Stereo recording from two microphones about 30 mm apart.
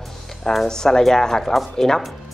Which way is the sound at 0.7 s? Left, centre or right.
Left.